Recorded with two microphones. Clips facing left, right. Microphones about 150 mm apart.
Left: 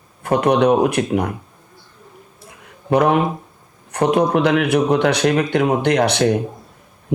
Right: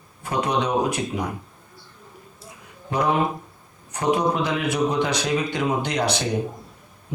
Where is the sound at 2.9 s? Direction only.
65° left (ahead or behind).